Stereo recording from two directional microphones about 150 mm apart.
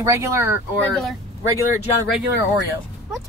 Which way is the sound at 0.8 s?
10° left (ahead or behind).